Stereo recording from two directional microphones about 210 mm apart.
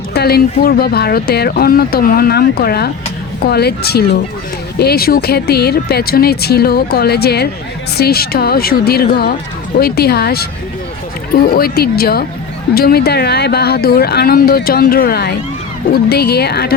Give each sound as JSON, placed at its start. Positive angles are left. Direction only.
{"t": 0.1, "sound": "speech", "side_deg": 50}